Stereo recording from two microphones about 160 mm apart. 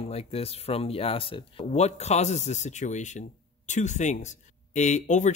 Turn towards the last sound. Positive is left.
turn(degrees=50)  # may be behind; listen again after turning